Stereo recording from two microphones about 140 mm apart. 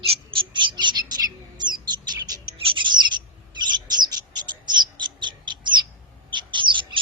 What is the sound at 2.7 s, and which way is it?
Bird, 35° right (ahead or behind).